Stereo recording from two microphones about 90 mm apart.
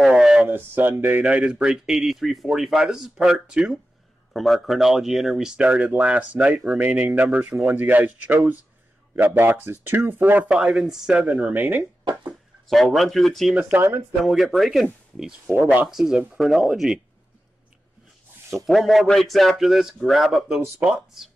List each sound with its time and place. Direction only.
0.0 s a sound: 5° right (ahead or behind)
0.7 s speech: 20° right (ahead or behind)
1.2 s speech: 10° right (ahead or behind)
10.5 s speech: 5° right (ahead or behind)
12.0 s a sound: 65° right (ahead or behind)
12.6 s speech: centre (ahead or behind)
13.6 s speech: 20° right (ahead or behind)
14.2 s speech: centre (ahead or behind)
15.5 s speech: 15° right (ahead or behind)
15.9 s speech: 5° right (ahead or behind)
18.7 s speech: centre (ahead or behind)